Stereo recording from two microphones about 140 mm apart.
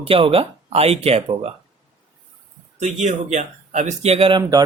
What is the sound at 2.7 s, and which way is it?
Speech, 55° right (ahead or behind).